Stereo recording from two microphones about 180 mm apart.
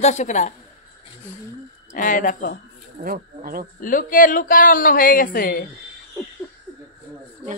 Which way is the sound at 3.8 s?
50° left (ahead or behind).